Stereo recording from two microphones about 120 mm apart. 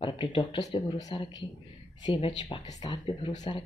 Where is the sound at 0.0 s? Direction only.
40° left (ahead or behind).